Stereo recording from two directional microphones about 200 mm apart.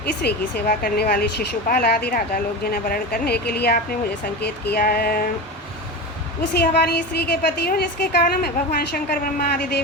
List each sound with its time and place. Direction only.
0.0 s speech: 55° left (ahead or behind)
6.5 s speech: 55° left (ahead or behind)